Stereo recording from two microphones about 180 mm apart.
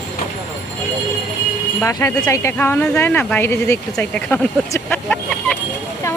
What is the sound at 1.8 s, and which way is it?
Speech, 15° left (ahead or behind).